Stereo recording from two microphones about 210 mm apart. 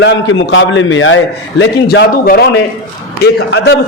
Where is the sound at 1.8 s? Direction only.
50° left (ahead or behind).